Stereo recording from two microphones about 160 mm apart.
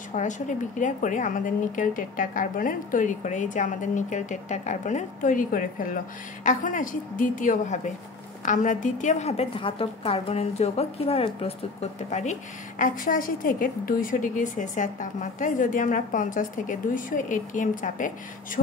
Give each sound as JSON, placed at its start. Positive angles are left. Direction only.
{"t": 0.1, "sound": "a woman's voice", "side_deg": 50}